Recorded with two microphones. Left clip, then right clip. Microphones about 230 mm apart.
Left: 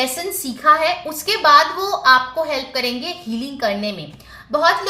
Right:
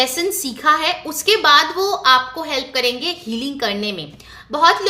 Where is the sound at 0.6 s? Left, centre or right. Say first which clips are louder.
Left 2 dB; right.